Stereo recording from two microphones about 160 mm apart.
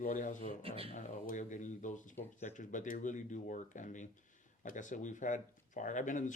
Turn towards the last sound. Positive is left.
turn(degrees=50)  # may be behind; listen again after turning